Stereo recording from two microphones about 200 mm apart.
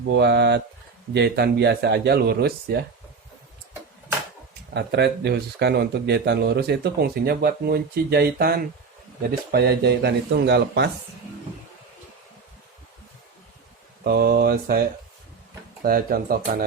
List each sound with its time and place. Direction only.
0.1 s speech: 55° right (ahead or behind)
4.7 s speech: 60° right (ahead or behind)
14.0 s speech: 55° right (ahead or behind)